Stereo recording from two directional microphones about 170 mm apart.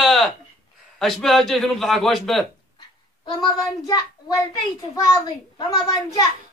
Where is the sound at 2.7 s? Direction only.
25° left (ahead or behind).